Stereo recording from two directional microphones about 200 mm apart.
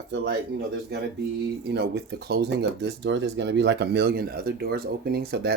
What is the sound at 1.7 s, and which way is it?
Speech, 55° right (ahead or behind).